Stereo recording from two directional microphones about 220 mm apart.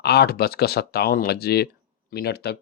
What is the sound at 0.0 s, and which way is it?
Speech, 45° left (ahead or behind).